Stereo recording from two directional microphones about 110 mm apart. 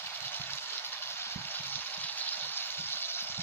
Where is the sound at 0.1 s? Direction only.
20° left (ahead or behind).